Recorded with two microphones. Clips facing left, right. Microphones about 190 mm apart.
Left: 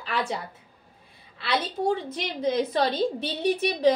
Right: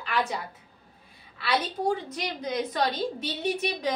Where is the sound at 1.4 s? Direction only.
25° left (ahead or behind).